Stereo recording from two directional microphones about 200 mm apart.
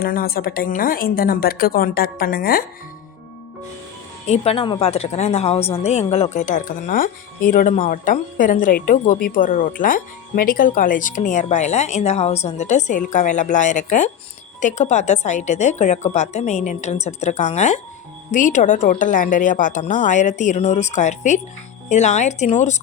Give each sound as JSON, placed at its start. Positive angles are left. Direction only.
{"t": 0.0, "sound": "a woman's voice", "side_deg": 45}
{"t": 4.3, "sound": "a woman's voice", "side_deg": 30}